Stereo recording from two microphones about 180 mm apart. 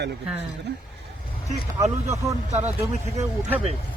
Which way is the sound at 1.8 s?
15° right (ahead or behind).